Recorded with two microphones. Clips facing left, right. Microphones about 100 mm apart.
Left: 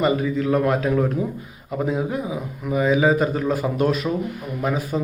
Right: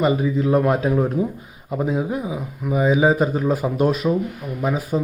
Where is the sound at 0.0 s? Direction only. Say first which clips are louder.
Right 1 dB; 15° right (ahead or behind).